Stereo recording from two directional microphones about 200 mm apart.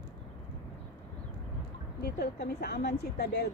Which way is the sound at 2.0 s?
55° left (ahead or behind).